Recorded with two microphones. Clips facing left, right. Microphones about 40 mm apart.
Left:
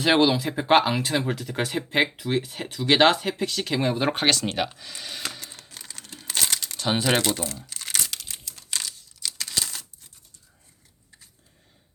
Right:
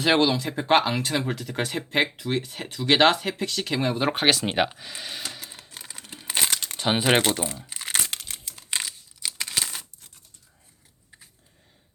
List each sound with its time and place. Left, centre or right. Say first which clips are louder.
0.0 s speech: left 1 dB; centre
5.3 s crumpling: even; centre; by 6.6 s right
6.6 s speech: right 1 dB; right
7.6 s crumpling: right 1 dB; right
8.1 s crumpling: right 1 dB; right